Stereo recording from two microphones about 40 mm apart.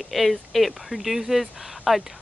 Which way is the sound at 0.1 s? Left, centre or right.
Centre.